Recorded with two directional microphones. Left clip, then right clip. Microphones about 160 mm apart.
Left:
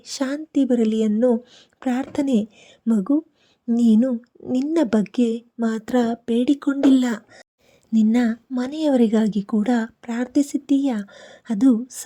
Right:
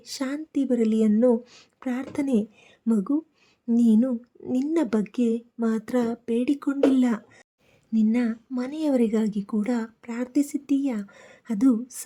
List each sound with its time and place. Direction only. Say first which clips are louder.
0.0 s a woman's voice: left 5 dB; 25° left (ahead or behind)
1.3 s speech: left 2 dB; 10° left (ahead or behind)
1.8 s a woman's voice: left 5 dB; 30° left (ahead or behind)